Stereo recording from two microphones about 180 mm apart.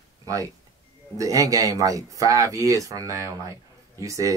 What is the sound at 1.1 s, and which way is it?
Speech, 20° right (ahead or behind).